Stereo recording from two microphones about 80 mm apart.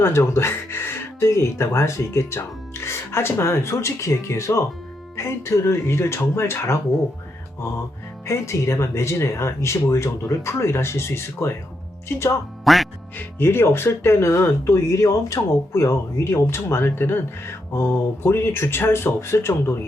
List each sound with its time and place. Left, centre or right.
0.0 s speech: left
8.3 s speech: left
12.6 s quack: centre
13.1 s speech: left